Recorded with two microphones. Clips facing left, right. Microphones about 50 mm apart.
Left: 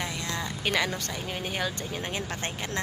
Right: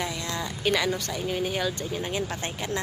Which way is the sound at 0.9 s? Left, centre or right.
Left.